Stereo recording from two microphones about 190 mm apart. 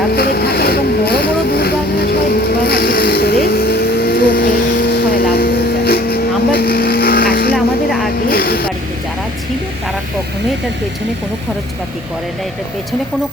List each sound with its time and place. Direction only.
0.1 s vehicle: 55° left (ahead or behind)